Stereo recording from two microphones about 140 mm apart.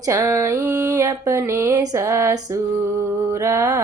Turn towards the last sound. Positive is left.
turn(degrees=-20)  # may be behind; listen again after turning